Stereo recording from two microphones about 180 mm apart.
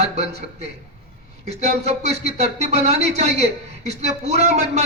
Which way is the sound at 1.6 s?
35° right (ahead or behind).